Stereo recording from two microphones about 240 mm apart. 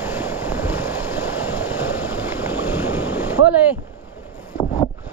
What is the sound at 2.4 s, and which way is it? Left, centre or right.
Boat, centre.